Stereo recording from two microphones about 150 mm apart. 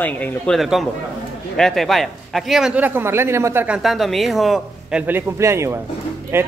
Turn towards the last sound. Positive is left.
turn(degrees=-15)  # may be behind; listen again after turning